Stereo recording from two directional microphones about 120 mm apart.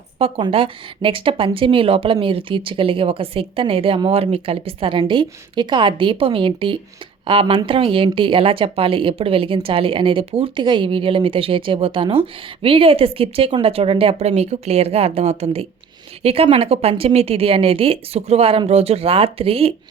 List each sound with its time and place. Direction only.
0.2 s a woman's voice: 50° right (ahead or behind)